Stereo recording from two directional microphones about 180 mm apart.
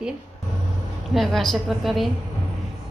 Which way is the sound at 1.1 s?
Centre (ahead or behind).